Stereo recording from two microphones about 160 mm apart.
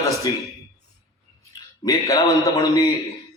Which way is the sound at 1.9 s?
20° left (ahead or behind).